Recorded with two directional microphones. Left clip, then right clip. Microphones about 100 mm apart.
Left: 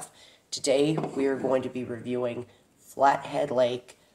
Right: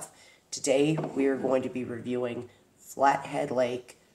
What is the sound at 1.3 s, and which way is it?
Speech, 15° left (ahead or behind).